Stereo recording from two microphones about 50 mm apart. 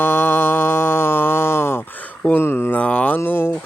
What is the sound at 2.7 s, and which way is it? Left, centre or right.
Mantra, left.